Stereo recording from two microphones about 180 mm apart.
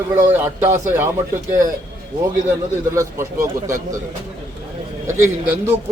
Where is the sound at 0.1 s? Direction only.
15° right (ahead or behind).